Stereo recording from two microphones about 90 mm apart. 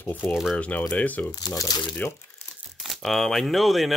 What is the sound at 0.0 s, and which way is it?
Speech, 20° left (ahead or behind).